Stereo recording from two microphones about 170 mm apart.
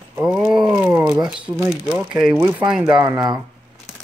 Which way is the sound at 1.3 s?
5° right (ahead or behind).